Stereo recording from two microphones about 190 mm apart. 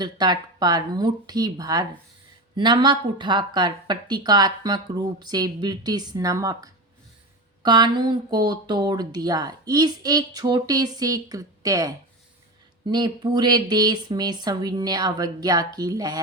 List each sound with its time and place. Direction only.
0.0 s speech: 20° right (ahead or behind)